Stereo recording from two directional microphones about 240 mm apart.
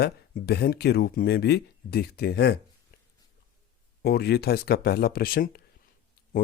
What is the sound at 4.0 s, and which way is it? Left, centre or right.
Speech, left.